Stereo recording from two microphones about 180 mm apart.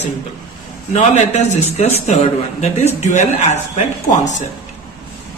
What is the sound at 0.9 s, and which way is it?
Speech, 40° left (ahead or behind).